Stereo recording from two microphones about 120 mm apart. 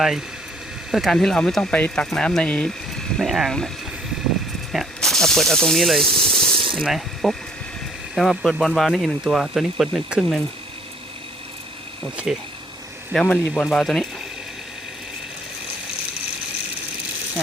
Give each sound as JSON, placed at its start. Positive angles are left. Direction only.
{"t": 0.9, "sound": "speech", "side_deg": 0}
{"t": 4.7, "sound": "speech", "side_deg": 0}
{"t": 6.1, "sound": "a sound", "side_deg": -50}
{"t": 6.8, "sound": "speech", "side_deg": 0}
{"t": 12.1, "sound": "speech", "side_deg": -5}
{"t": 13.2, "sound": "speech", "side_deg": 15}
{"t": 13.7, "sound": "speech", "side_deg": 0}